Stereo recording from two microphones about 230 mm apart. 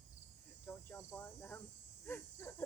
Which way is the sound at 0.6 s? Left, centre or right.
Centre.